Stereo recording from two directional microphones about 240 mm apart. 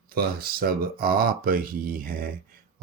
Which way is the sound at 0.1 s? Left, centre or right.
Right.